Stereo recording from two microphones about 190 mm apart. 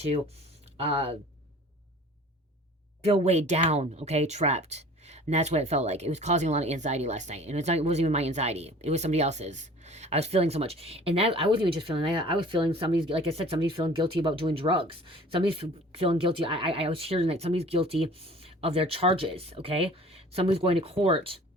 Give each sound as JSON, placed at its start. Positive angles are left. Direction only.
{"t": 0.8, "sound": "speech", "side_deg": -30}
{"t": 3.0, "sound": "speech", "side_deg": -35}